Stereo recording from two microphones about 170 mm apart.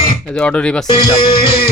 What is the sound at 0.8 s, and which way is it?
Music, 25° left (ahead or behind).